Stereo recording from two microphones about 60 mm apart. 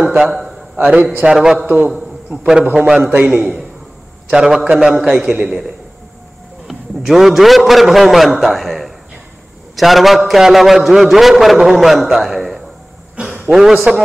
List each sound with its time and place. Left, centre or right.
0.2 s a man's voice: centre
0.7 s a man's voice: right
1.2 s a man's voice: centre
2.6 s a man's voice: right
3.3 s a man's voice: centre
6.7 s a man's voice: centre